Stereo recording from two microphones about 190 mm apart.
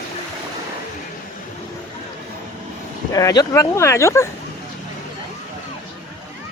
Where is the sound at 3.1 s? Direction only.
20° left (ahead or behind).